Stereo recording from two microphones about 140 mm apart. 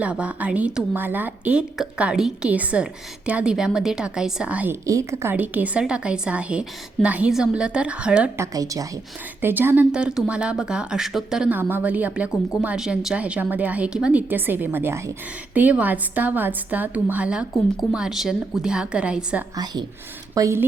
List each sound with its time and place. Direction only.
0.0 s speech: 10° right (ahead or behind)
8.4 s a woman's voice: 25° right (ahead or behind); by 19.5 s 10° right (ahead or behind)
20.3 s speech: 20° right (ahead or behind)